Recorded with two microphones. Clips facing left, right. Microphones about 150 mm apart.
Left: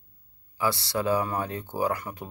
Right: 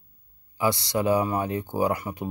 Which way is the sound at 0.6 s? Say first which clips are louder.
Right 3 dB; 15° right (ahead or behind).